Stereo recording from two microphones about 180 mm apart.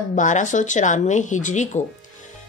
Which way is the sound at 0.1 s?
45° left (ahead or behind).